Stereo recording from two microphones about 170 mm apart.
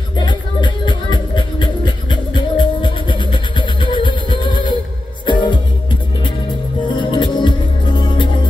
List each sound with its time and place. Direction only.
0.2 s music: 30° left (ahead or behind)
7.0 s music: 25° left (ahead or behind)